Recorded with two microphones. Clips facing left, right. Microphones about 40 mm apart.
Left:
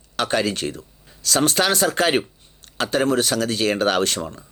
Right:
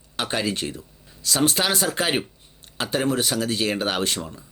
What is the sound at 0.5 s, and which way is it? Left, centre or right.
Speech, left.